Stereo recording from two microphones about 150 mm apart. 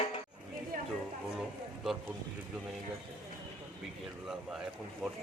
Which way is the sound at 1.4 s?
Centre (ahead or behind).